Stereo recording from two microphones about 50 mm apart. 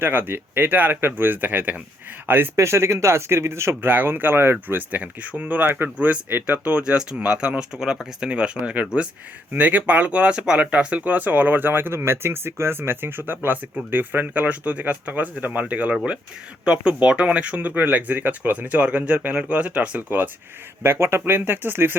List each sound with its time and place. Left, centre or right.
0.0 s speech: right
2.6 s speech: right
4.7 s speech: right
17.7 s speech: right
20.0 s speech: right
20.8 s speech: right